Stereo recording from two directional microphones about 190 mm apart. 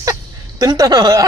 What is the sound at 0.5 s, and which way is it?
Speech, 20° right (ahead or behind).